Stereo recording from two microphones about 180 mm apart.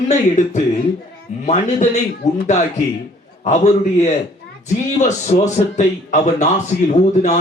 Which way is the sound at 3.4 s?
40° left (ahead or behind).